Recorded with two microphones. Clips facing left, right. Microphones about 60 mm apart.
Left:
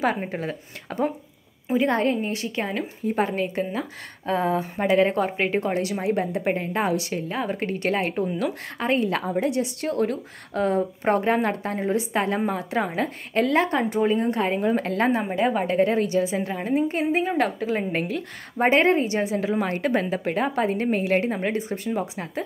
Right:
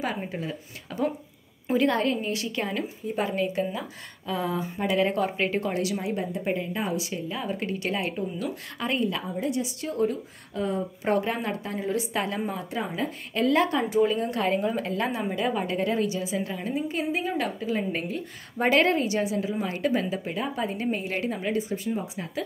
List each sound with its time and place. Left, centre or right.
0.0 s a woman's voice: left
1.9 s a woman's voice: left
6.9 s a woman's voice: left
7.2 s a woman's voice: left
9.0 s a woman's voice: left
11.1 s a woman's voice: left
11.9 s a woman's voice: left
12.5 s a woman's voice: left
13.3 s a woman's voice: left
18.6 s speech: left
19.1 s a woman's voice: left
21.9 s speech: left